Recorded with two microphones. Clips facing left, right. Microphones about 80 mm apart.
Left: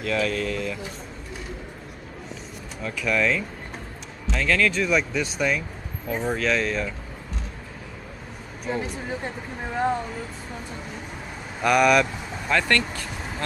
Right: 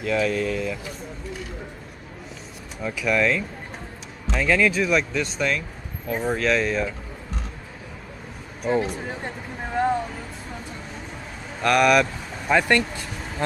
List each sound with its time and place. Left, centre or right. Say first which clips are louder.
0.0 s speech: right 2 dB; centre
2.8 s speech: right 2 dB; centre
8.9 s speech: left 1 dB; centre
11.6 s speech: right 1 dB; centre
12.4 s speech: right 3 dB; centre